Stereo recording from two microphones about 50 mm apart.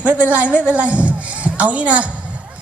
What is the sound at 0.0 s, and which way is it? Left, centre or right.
A woman's voice, right.